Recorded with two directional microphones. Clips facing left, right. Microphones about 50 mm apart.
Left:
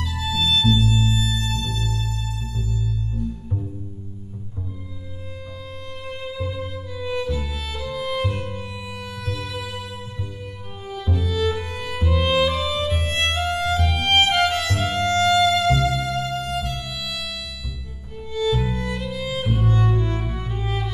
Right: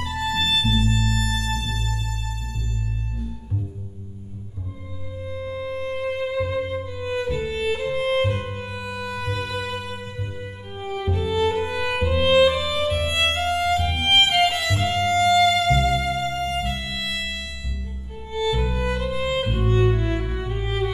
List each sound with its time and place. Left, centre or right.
0.0 s music: right
1.1 s music: right
5.6 s music: right
10.8 s music: right
13.4 s violin: centre
15.4 s music: centre; by 20.9 s right